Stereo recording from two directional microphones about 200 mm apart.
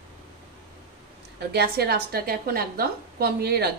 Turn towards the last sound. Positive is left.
turn(degrees=-55)  # may be behind; listen again after turning